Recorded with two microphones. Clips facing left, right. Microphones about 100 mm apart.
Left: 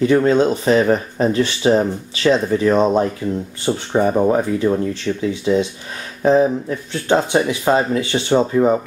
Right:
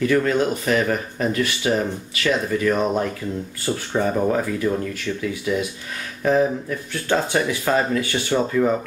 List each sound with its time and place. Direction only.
0.0 s speech: 25° left (ahead or behind)